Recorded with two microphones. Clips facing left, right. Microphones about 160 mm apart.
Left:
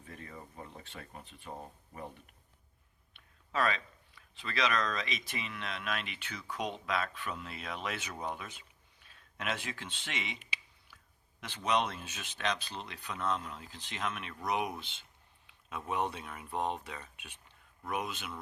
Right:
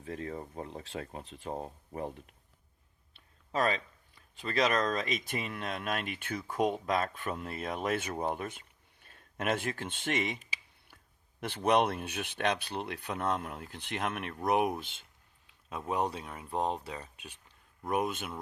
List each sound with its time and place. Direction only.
0.0 s speech: 75° right (ahead or behind)
3.1 s speech: 40° right (ahead or behind)
15.9 s speech: 35° right (ahead or behind)
17.8 s speech: 45° right (ahead or behind)